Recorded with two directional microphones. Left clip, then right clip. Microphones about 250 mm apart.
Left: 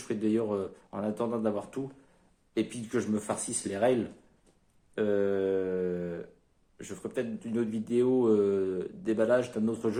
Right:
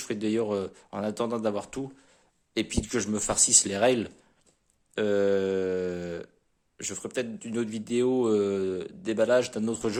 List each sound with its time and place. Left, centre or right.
0.1 s speech: right
4.9 s a sound: right
6.7 s speech: right